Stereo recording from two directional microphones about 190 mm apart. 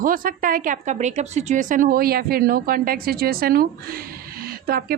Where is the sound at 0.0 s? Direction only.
50° right (ahead or behind).